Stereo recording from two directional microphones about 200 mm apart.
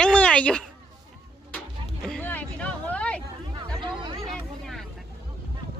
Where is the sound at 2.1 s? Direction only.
5° left (ahead or behind).